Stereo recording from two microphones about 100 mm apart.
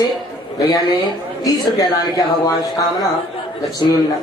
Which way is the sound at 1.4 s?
40° left (ahead or behind).